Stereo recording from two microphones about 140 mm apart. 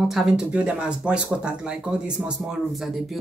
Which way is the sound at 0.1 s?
5° right (ahead or behind).